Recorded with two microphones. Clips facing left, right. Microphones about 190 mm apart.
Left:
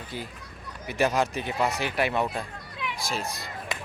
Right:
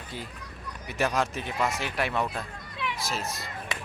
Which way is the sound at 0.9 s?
Centre (ahead or behind).